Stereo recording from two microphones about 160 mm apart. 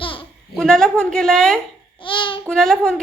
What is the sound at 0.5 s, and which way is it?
A woman's voice, 5° left (ahead or behind).